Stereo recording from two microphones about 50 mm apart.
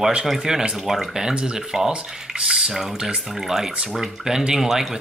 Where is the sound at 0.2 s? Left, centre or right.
Centre.